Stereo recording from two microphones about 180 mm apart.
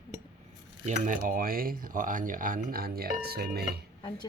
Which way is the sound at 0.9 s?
45° right (ahead or behind).